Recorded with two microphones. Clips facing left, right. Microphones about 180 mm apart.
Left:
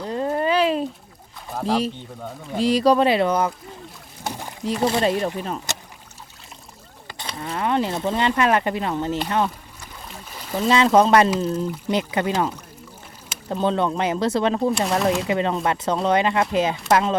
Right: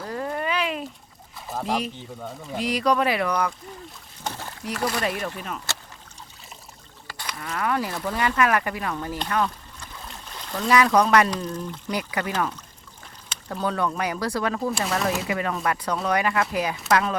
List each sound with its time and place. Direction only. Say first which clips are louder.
0.0 s a sound: left 6 dB; 25° left (ahead or behind)
1.5 s pour: left 3 dB; 5° right (ahead or behind)
2.6 s speech: left 6 dB; 30° left (ahead or behind)
4.2 s rowboat: left 2 dB; 15° left (ahead or behind)
4.6 s speech: left 6 dB; 25° left (ahead or behind)
5.7 s rowboat: left 3 dB; 20° left (ahead or behind)
7.1 s speech: left 3 dB; 25° left (ahead or behind)
9.8 s stream: left 1 dB; 10° left (ahead or behind)
10.7 s speech: left 3 dB; 25° left (ahead or behind)
13.5 s speech: left 5 dB; 25° left (ahead or behind)